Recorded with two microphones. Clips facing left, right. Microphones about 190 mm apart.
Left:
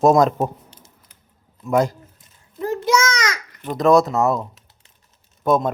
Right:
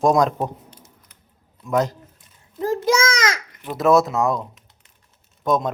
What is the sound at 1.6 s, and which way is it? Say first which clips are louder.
Speech: left 2 dB; 10° left (ahead or behind).